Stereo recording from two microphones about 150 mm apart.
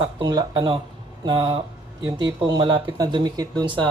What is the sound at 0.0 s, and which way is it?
Speech, 30° right (ahead or behind).